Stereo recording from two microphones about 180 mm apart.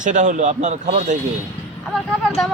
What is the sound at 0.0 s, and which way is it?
A man's voice, 45° right (ahead or behind).